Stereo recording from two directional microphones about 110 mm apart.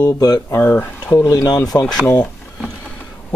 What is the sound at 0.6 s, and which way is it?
Speech, 20° left (ahead or behind).